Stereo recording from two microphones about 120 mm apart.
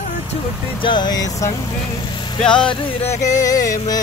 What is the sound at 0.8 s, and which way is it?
Speech, 40° left (ahead or behind).